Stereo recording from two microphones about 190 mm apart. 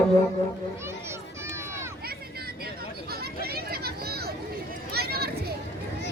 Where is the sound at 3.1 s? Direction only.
55° right (ahead or behind).